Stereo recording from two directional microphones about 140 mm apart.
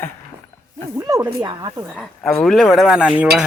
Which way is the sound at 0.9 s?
25° right (ahead or behind).